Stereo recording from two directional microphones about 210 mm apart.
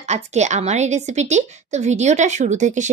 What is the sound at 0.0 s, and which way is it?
A woman's voice, 30° right (ahead or behind).